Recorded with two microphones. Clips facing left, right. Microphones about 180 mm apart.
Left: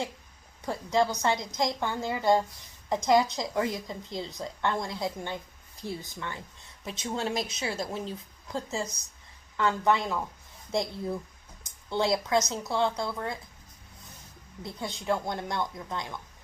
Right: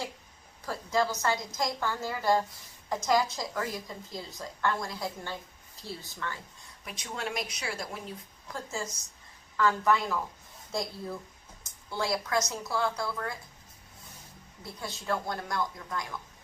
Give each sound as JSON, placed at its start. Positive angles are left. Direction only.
{"t": 0.6, "sound": "a woman's voice", "side_deg": 20}
{"t": 14.6, "sound": "a woman's voice", "side_deg": 20}